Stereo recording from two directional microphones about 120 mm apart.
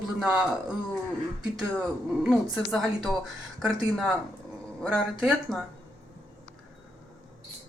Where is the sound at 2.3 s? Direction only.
5° left (ahead or behind).